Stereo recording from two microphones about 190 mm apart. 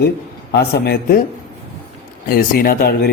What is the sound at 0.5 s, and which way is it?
Speech, 60° left (ahead or behind).